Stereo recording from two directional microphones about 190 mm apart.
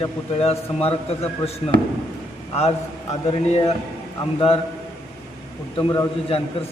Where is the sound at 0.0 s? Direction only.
30° left (ahead or behind).